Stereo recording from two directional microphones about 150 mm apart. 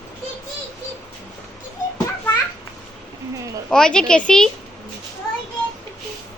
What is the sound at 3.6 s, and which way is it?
Speech, 5° left (ahead or behind).